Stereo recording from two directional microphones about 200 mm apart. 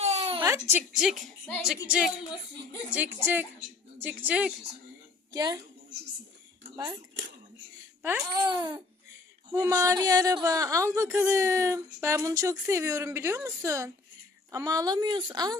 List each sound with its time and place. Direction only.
0.0 s a sound: 30° right (ahead or behind)
0.4 s a woman's voice: 10° right (ahead or behind)
5.3 s speech: 20° right (ahead or behind)
8.0 s speech: 15° right (ahead or behind)